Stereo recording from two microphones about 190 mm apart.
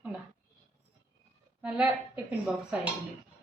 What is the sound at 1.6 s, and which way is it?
Speech, 5° right (ahead or behind).